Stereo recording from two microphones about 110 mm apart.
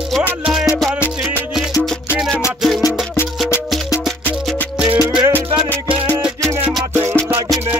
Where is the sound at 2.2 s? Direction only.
5° right (ahead or behind).